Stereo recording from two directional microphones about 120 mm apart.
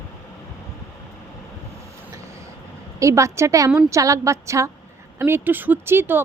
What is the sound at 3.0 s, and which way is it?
Speech, 25° right (ahead or behind).